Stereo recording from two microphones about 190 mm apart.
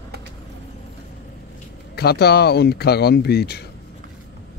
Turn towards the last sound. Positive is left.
turn(degrees=55)  # may be behind; listen again after turning